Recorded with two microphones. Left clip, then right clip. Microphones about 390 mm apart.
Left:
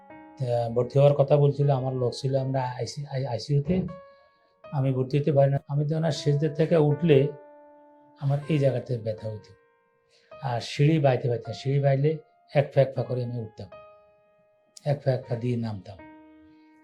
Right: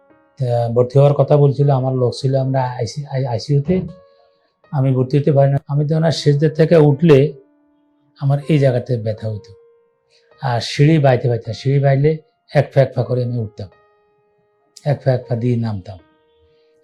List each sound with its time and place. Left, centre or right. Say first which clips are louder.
0.3 s speech: right 9 dB; right
10.3 s speech: right 10 dB; right
14.8 s speech: right 8 dB; right